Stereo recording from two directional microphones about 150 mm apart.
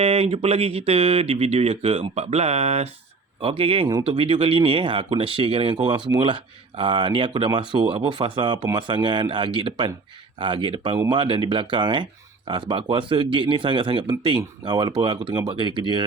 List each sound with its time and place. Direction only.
0.0 s speech: 40° right (ahead or behind)